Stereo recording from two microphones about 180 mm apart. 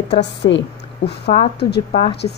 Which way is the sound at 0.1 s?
75° left (ahead or behind).